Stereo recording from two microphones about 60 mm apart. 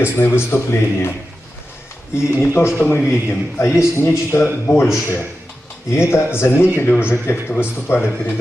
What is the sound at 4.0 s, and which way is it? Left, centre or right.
A man's voice, left.